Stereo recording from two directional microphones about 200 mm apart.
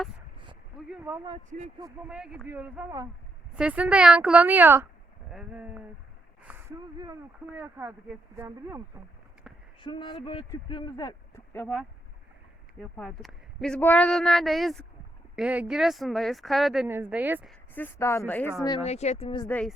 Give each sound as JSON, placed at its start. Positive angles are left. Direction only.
{"t": 0.9, "sound": "speech", "side_deg": -10}
{"t": 1.5, "sound": "speech", "side_deg": -35}
{"t": 2.0, "sound": "a woman's voice", "side_deg": -5}
{"t": 6.4, "sound": "a sound", "side_deg": -10}
{"t": 7.0, "sound": "a woman's voice", "side_deg": -15}
{"t": 9.8, "sound": "speech", "side_deg": 25}
{"t": 12.8, "sound": "speech", "side_deg": 0}
{"t": 17.5, "sound": "speech", "side_deg": 10}
{"t": 18.6, "sound": "speech", "side_deg": 20}
{"t": 18.9, "sound": "speech", "side_deg": 35}
{"t": 19.5, "sound": "speech", "side_deg": 5}